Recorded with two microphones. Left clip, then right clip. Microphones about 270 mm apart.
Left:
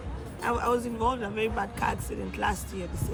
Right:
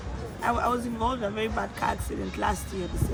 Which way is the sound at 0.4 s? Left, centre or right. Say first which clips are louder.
Right 1 dB; centre.